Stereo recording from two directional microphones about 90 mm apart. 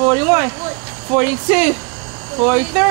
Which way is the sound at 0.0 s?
20° right (ahead or behind).